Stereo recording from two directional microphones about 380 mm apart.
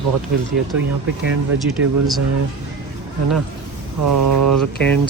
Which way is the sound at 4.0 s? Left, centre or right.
Right.